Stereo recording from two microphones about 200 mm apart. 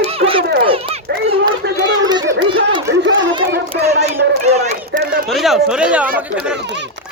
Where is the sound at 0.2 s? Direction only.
25° right (ahead or behind).